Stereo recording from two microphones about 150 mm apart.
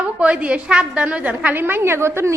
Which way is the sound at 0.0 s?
5° right (ahead or behind).